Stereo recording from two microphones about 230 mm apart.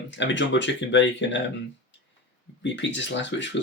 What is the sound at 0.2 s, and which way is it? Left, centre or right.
Speech, left.